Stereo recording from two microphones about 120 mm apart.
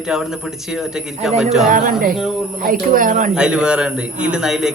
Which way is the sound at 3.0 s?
90° right.